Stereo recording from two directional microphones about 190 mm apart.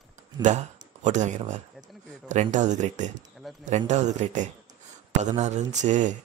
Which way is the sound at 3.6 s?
40° right (ahead or behind).